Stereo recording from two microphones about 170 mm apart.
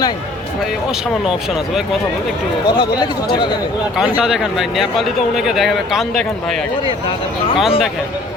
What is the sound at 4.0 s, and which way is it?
Speech, 5° right (ahead or behind).